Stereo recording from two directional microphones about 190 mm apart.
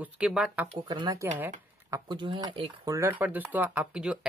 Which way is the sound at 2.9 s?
15° right (ahead or behind).